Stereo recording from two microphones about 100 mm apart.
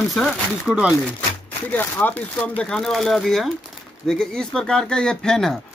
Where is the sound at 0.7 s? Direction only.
10° right (ahead or behind).